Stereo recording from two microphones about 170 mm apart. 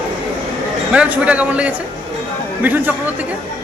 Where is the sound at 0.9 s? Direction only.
10° right (ahead or behind).